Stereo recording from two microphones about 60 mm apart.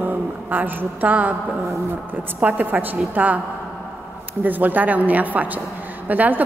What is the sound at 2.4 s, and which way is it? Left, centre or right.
Speech, right.